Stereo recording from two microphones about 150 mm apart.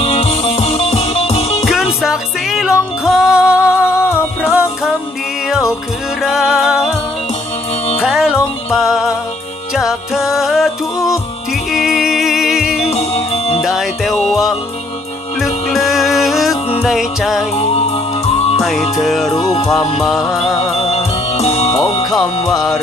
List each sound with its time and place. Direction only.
0.0 s music: 40° left (ahead or behind)
1.6 s music: centre (ahead or behind)
4.0 s music: 15° left (ahead or behind)
4.5 s music: 5° right (ahead or behind)
6.2 s music: 5° right (ahead or behind)
8.0 s music: 5° right (ahead or behind)
12.9 s music: 45° left (ahead or behind)
13.6 s music: centre (ahead or behind)
17.6 s music: 45° left (ahead or behind)
18.6 s music: centre (ahead or behind)
19.4 s music: 30° left (ahead or behind)
20.0 s music: centre (ahead or behind)
20.8 s music: 45° left (ahead or behind)